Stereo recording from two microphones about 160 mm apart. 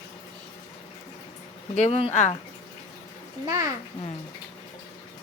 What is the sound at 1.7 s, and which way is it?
Speech, 40° left (ahead or behind).